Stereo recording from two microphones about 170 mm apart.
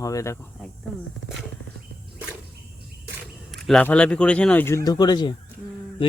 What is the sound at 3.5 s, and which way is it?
A man's voice, 5° left (ahead or behind).